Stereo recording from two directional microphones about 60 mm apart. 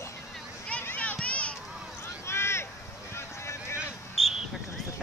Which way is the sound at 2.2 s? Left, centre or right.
Left.